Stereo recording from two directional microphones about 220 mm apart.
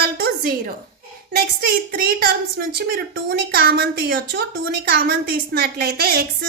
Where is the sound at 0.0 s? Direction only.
45° right (ahead or behind).